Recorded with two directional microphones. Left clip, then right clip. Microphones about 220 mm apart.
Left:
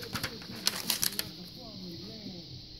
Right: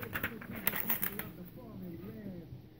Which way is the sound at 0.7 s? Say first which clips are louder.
Left 8 dB; 25° left (ahead or behind).